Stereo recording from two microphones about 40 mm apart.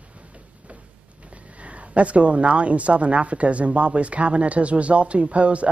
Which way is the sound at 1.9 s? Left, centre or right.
Right.